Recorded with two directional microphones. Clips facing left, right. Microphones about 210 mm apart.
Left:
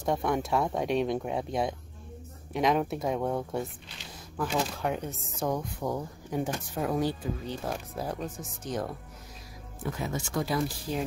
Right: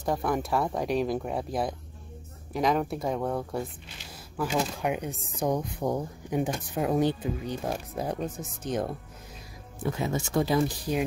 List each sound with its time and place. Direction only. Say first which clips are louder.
0.0 s speech: even; centre (ahead or behind); by 8.9 s 20° right (ahead or behind)
9.9 s speech: right 5 dB; 25° right (ahead or behind)